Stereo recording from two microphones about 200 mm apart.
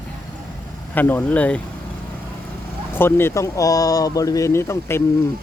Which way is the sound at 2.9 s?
10° left (ahead or behind).